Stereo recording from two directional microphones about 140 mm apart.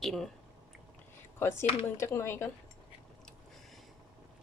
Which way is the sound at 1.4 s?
20° left (ahead or behind).